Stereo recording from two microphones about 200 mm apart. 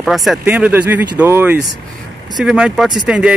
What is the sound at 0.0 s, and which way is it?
Speech, centre (ahead or behind).